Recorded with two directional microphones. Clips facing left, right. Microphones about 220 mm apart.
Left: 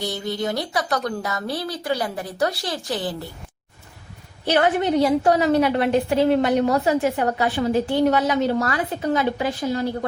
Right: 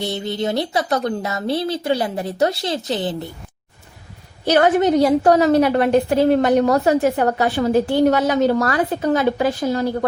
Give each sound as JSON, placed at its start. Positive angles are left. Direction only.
{"t": 0.0, "sound": "speech", "side_deg": -25}
{"t": 4.4, "sound": "a woman's voice", "side_deg": -40}